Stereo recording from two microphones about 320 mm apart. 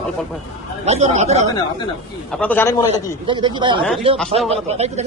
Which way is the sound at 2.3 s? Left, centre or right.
Centre.